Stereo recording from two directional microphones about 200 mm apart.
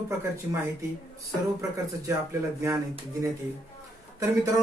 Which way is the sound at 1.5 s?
15° right (ahead or behind).